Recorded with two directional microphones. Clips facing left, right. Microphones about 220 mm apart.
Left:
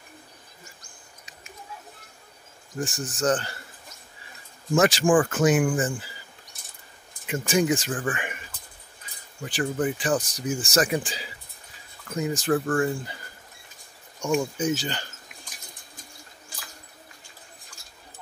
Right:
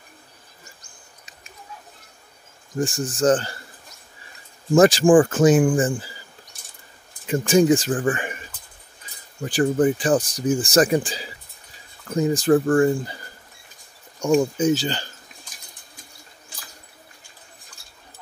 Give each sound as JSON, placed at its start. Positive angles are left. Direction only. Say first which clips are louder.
{"t": 2.8, "sound": "speech", "louder": "right 6 dB", "side_deg": -30}
{"t": 4.7, "sound": "speech", "louder": "right 6 dB", "side_deg": -35}
{"t": 7.2, "sound": "speech", "louder": "right 7 dB", "side_deg": -30}
{"t": 9.4, "sound": "speech", "louder": "right 7 dB", "side_deg": -35}
{"t": 14.2, "sound": "speech", "louder": "right 6 dB", "side_deg": -35}